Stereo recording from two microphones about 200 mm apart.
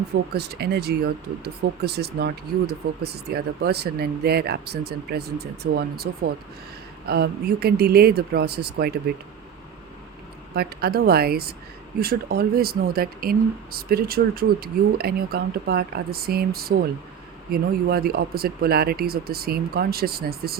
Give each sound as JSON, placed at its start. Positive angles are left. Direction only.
{"t": 0.3, "sound": "speech", "side_deg": -55}
{"t": 10.5, "sound": "speech", "side_deg": -50}